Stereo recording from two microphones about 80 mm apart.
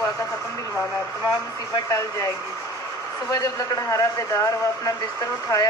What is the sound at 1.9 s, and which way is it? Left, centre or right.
A man's voice, left.